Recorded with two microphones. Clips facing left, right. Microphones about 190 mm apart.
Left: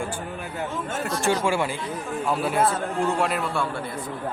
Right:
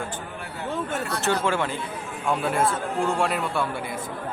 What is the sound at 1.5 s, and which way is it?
A man's voice, 10° left (ahead or behind).